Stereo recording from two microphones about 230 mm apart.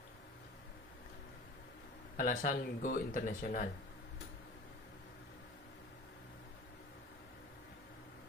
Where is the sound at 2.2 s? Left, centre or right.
Left.